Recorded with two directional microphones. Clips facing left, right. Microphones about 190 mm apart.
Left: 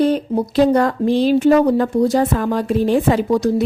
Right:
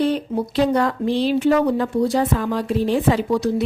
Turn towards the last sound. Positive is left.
turn(degrees=45)  # may be behind; listen again after turning